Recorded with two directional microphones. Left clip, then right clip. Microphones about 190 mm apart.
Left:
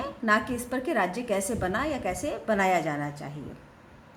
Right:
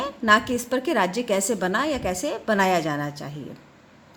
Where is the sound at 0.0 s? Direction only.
50° right (ahead or behind).